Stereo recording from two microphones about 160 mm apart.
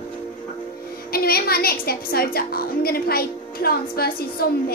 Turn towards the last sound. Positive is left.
turn(degrees=75)  # may be behind; listen again after turning